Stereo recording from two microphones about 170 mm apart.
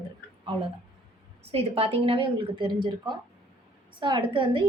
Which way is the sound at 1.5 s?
35° right (ahead or behind).